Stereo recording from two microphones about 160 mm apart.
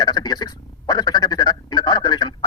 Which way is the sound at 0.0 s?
25° left (ahead or behind).